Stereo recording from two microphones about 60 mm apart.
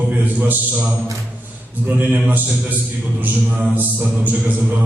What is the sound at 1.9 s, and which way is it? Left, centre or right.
A man's voice, right.